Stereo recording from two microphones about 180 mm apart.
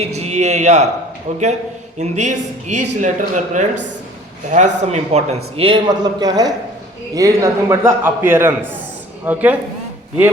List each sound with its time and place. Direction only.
0.0 s speech: 35° right (ahead or behind)
2.0 s a man's voice: 40° right (ahead or behind); by 9.6 s 10° right (ahead or behind)